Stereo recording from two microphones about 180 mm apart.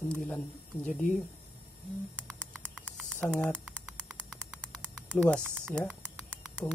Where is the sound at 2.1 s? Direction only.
5° left (ahead or behind).